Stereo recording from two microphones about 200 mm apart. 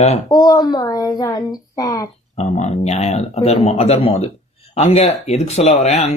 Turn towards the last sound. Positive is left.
turn(degrees=35)  # may be behind; listen again after turning